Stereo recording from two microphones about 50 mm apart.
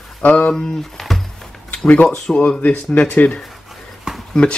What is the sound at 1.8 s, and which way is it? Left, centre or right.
Speech, left.